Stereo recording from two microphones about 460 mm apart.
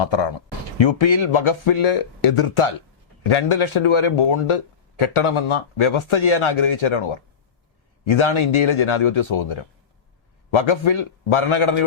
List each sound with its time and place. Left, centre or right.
0.0 s speech: left